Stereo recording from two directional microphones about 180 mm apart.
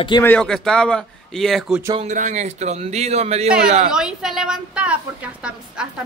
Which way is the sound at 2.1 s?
45° right (ahead or behind).